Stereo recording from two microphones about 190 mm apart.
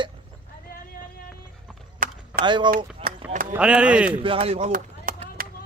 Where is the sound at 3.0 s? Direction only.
25° right (ahead or behind).